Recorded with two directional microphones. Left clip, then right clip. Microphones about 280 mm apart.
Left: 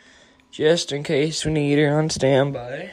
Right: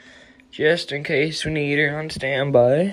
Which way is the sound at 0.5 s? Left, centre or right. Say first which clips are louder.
Even; centre.